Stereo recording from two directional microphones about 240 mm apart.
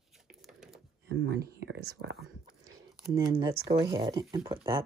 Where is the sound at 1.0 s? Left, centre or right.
Right.